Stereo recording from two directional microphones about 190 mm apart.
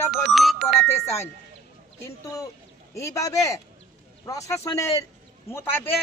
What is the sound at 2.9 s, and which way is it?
A man's voice, 15° left (ahead or behind).